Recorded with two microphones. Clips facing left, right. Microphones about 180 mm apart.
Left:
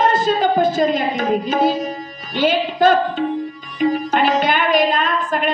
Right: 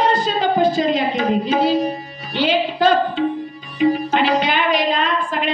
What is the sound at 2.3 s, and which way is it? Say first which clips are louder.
Music: left 1 dB; 45° left (ahead or behind).